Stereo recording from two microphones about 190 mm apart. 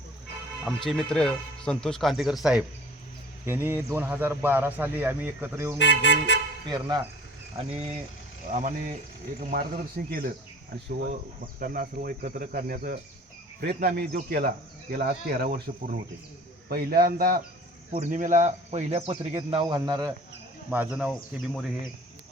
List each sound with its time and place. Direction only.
0.6 s a man's voice: centre (ahead or behind)
5.7 s speech: 65° left (ahead or behind)
6.7 s speech: 20° right (ahead or behind)
7.5 s speech: 35° right (ahead or behind)
9.4 s speech: 50° right (ahead or behind)
11.6 s speech: 50° right (ahead or behind); by 20.1 s 20° right (ahead or behind)
20.7 s speech: 5° right (ahead or behind)